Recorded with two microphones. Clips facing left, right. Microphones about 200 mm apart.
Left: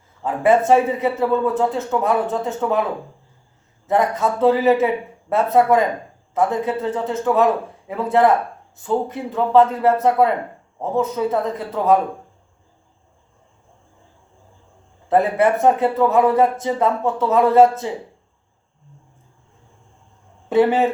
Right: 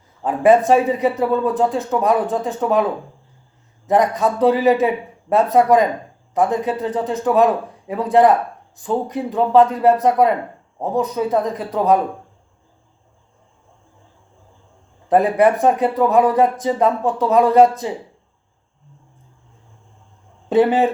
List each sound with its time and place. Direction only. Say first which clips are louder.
0.2 s speech: right 3 dB; 15° right (ahead or behind)
3.8 s speech: right 2 dB; 15° right (ahead or behind)
15.1 s speech: right 2 dB; 15° right (ahead or behind)
20.5 s speech: right 1 dB; 20° right (ahead or behind)